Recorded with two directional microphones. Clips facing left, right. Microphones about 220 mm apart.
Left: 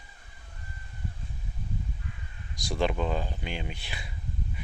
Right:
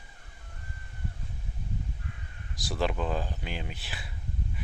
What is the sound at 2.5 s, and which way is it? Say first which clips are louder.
Speech: left 2 dB; 5° right (ahead or behind).